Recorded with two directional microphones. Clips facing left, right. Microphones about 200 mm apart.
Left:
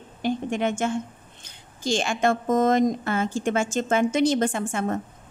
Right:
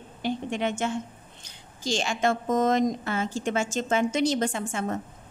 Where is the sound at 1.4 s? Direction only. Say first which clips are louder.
Left 4 dB; 55° left (ahead or behind).